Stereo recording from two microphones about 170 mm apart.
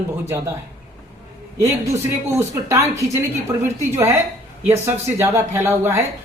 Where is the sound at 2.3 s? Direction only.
15° right (ahead or behind).